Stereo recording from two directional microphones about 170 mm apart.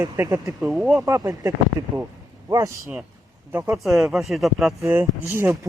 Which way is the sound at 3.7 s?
Centre (ahead or behind).